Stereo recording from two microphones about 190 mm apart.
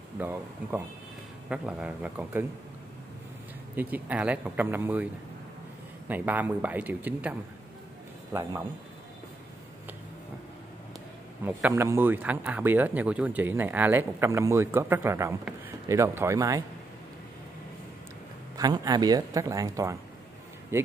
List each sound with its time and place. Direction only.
0.2 s speech: 10° right (ahead or behind)
3.7 s speech: 10° right (ahead or behind)
11.4 s speech: 10° right (ahead or behind)
18.6 s speech: 20° right (ahead or behind)